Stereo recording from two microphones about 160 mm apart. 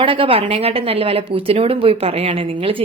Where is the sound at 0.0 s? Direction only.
35° right (ahead or behind).